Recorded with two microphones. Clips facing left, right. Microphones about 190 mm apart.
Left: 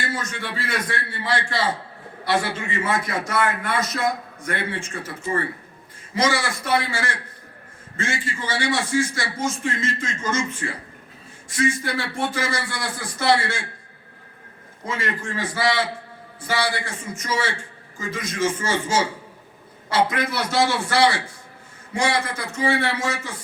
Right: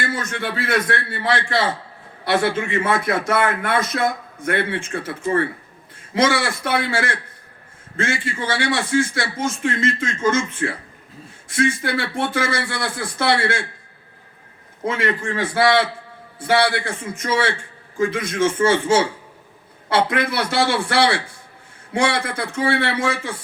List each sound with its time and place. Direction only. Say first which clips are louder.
0.3 s a man's voice: right 6 dB; 60° right (ahead or behind)
14.8 s a man's voice: right 6 dB; 60° right (ahead or behind)